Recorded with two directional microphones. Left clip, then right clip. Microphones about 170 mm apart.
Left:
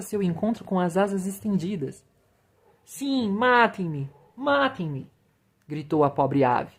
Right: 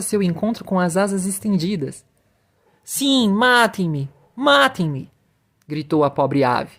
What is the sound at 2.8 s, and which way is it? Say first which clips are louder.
A woman's voice: right 10 dB; 45° right (ahead or behind).